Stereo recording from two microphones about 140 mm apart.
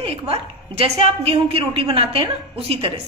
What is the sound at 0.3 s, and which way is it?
A woman's voice, 45° right (ahead or behind).